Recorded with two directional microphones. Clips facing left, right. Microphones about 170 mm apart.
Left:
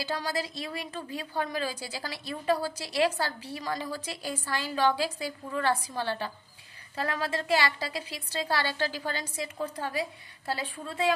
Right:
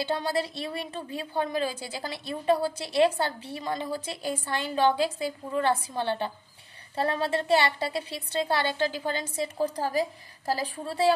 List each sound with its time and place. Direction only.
0.0 s a woman's voice: 25° right (ahead or behind)